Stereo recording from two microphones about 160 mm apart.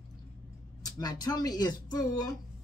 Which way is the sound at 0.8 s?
25° left (ahead or behind).